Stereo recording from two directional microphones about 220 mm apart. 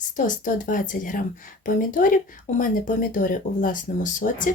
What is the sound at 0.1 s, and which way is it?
A woman's voice, 35° left (ahead or behind).